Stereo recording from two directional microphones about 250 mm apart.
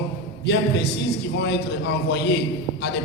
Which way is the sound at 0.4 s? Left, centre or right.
Left.